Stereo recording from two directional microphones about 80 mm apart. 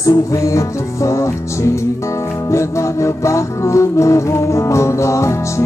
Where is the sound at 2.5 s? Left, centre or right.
Left.